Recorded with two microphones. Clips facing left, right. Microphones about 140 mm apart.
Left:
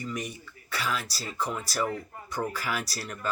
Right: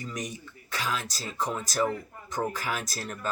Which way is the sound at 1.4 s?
45° right (ahead or behind).